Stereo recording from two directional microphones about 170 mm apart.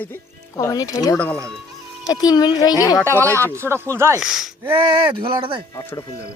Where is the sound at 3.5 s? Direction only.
15° right (ahead or behind).